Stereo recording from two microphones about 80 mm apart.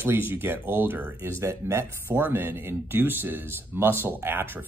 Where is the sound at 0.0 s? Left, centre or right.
Right.